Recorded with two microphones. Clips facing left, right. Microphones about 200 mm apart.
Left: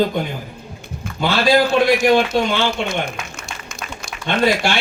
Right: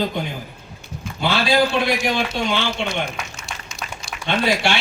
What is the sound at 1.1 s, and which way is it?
Speech, 45° left (ahead or behind).